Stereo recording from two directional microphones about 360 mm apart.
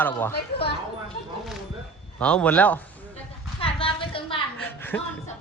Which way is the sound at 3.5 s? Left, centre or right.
Centre.